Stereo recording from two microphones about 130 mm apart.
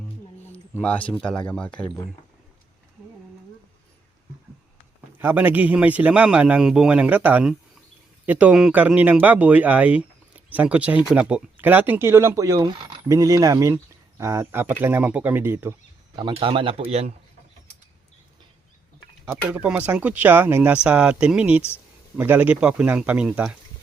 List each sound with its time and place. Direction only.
0.4 s a sound: 10° left (ahead or behind)
1.2 s speech: 5° left (ahead or behind)
5.2 s speech: 15° right (ahead or behind)
16.1 s speech: 40° right (ahead or behind)
19.5 s speech: 10° right (ahead or behind)